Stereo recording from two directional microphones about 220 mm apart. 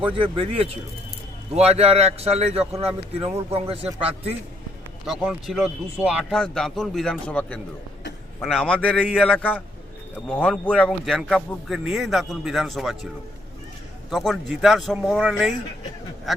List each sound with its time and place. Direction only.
0.0 s a man's voice: 25° right (ahead or behind)
5.0 s a man's voice: 5° right (ahead or behind)
14.1 s a man's voice: centre (ahead or behind)